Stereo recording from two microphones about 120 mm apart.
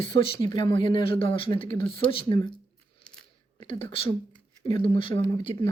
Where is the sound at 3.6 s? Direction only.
50° left (ahead or behind).